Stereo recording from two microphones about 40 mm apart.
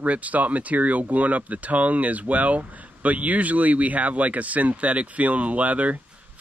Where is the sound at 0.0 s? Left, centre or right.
Right.